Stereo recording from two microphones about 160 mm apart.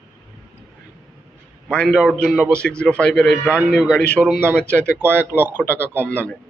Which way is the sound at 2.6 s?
5° left (ahead or behind).